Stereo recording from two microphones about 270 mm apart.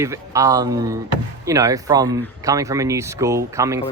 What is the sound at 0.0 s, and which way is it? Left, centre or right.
Speech, centre.